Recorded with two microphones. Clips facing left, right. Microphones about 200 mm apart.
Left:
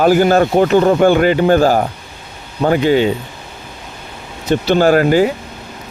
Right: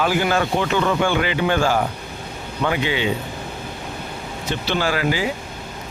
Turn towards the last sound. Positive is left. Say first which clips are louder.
# left 11 dB
turn(degrees=50)  # may be behind; listen again after turning